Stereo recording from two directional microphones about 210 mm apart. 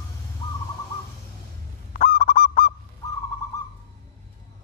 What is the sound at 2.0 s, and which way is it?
Goose, 40° left (ahead or behind).